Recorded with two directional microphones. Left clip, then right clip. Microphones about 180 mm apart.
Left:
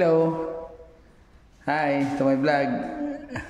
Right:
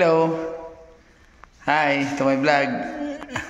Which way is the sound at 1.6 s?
10° left (ahead or behind).